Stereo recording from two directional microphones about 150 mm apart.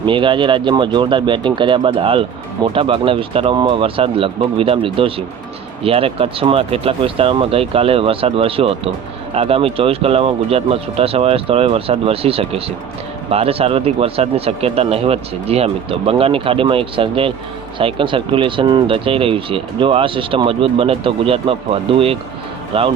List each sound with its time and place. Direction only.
0.0 s speech: 35° right (ahead or behind)